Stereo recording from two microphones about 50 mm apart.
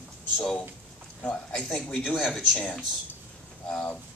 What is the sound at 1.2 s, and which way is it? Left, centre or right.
A man's voice, left.